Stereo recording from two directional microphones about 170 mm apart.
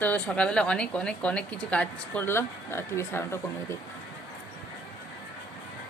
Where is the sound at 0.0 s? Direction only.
10° left (ahead or behind).